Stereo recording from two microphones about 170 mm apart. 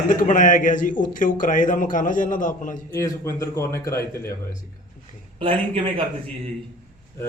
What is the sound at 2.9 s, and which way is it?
Speech, 15° left (ahead or behind).